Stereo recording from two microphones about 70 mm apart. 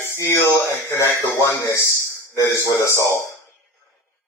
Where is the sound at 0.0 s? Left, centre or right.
Left.